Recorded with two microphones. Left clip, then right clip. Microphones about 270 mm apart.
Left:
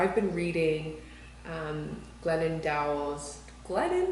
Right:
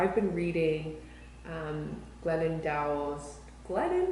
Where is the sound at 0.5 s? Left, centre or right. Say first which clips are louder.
Left 2 dB; right.